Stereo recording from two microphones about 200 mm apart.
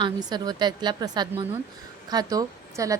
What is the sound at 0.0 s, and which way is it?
A woman's voice, 20° right (ahead or behind).